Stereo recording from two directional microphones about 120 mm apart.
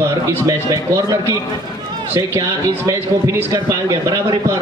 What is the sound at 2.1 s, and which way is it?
A man's voice, 25° right (ahead or behind).